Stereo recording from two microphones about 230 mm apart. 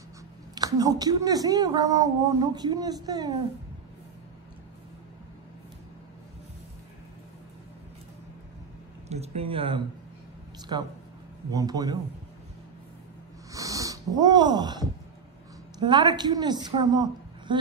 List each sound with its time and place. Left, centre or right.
0.6 s speech: centre
9.1 s a woman's voice: right
13.5 s snort: centre
15.8 s a woman's voice: centre